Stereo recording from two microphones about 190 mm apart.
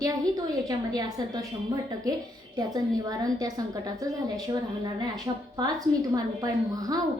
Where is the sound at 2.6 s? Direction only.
20° right (ahead or behind).